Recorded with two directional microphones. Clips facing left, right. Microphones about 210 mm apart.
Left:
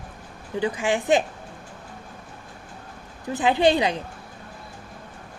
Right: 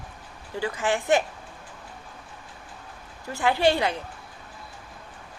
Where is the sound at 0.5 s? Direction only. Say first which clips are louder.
Left 3 dB; 15° left (ahead or behind).